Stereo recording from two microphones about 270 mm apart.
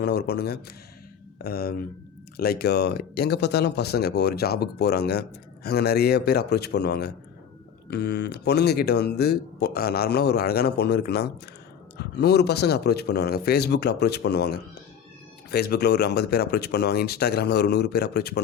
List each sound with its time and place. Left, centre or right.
0.0 s speech: left